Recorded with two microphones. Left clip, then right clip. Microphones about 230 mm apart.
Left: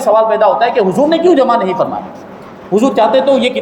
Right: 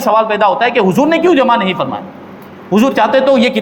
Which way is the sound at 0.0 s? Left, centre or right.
Right.